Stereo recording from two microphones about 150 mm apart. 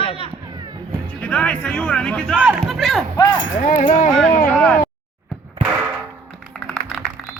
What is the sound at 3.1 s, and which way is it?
Speech, 25° left (ahead or behind).